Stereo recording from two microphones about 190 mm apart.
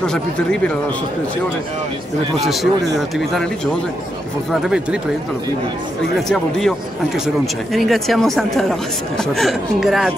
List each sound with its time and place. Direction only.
0.0 s speech: 5° left (ahead or behind)
2.4 s speech: centre (ahead or behind)
4.5 s speech: 5° right (ahead or behind)
6.2 s speech: centre (ahead or behind)
7.7 s speech: centre (ahead or behind)